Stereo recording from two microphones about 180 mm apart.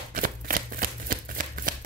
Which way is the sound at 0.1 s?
50° right (ahead or behind).